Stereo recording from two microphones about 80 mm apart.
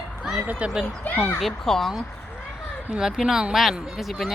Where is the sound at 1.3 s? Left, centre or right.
Centre.